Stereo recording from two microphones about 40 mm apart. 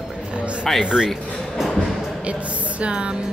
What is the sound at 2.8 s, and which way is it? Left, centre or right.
Music, right.